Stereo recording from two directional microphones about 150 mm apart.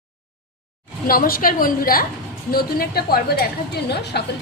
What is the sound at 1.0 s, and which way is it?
A woman's voice, 75° left (ahead or behind).